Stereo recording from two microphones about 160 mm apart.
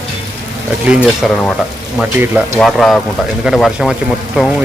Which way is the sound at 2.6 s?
Centre (ahead or behind).